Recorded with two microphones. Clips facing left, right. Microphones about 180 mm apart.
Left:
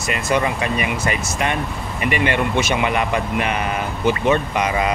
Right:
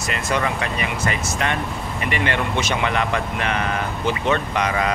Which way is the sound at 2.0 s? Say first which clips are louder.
Left 4 dB; 15° left (ahead or behind).